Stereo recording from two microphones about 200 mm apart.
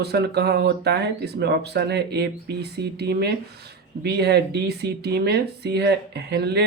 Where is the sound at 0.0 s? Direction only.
55° right (ahead or behind).